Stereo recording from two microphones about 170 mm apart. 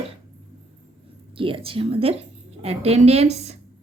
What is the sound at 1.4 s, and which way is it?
A woman's voice, 30° right (ahead or behind).